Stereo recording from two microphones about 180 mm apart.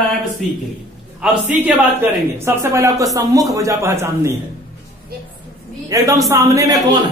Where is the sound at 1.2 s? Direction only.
10° right (ahead or behind).